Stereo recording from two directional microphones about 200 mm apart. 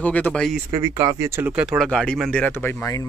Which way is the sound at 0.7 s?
20° right (ahead or behind).